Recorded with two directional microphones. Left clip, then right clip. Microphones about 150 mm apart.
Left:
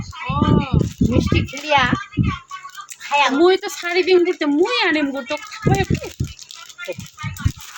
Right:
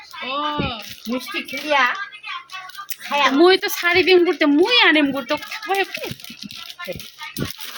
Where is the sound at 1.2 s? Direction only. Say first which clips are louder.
Left 3 dB; 90° left.